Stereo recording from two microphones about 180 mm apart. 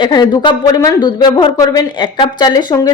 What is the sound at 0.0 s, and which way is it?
Speech, 25° left (ahead or behind).